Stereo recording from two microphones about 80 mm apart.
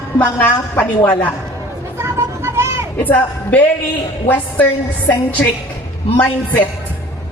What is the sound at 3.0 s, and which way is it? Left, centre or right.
Speech, left.